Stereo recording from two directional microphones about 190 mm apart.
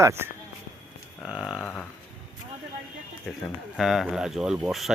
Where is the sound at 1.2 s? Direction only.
Centre (ahead or behind).